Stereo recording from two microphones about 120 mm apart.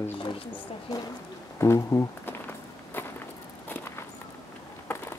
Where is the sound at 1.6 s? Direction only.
25° left (ahead or behind).